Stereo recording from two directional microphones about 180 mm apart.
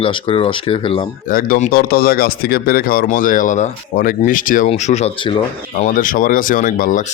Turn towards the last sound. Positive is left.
turn(degrees=50)  # may be behind; listen again after turning